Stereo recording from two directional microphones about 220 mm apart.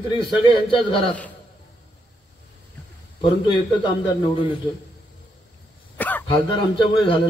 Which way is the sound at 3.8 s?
20° left (ahead or behind).